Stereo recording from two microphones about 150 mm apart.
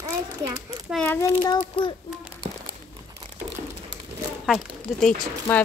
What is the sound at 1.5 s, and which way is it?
Speech, 35° left (ahead or behind).